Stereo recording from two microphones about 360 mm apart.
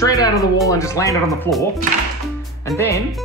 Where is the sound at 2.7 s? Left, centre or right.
Centre.